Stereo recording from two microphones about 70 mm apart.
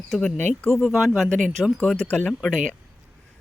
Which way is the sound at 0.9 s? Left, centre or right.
Centre.